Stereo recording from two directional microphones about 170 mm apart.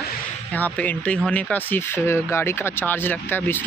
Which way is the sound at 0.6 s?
10° left (ahead or behind).